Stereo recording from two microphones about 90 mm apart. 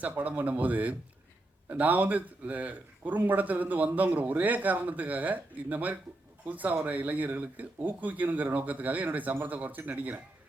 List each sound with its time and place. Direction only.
0.0 s speech: 20° right (ahead or behind)